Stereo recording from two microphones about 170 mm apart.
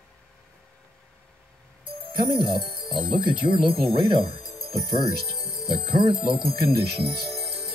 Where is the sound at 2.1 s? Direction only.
30° right (ahead or behind).